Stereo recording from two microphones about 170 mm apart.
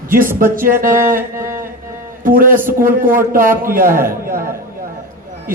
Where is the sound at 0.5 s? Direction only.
55° right (ahead or behind).